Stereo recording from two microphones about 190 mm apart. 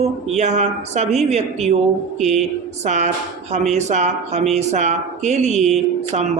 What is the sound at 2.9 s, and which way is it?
Speech, 40° right (ahead or behind).